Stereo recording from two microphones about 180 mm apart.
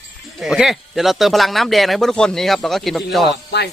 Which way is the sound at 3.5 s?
70° left (ahead or behind).